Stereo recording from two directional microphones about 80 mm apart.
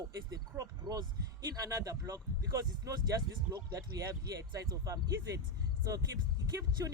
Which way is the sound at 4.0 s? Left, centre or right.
Right.